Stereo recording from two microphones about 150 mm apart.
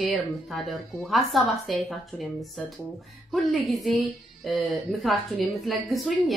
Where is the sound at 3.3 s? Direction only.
Centre (ahead or behind).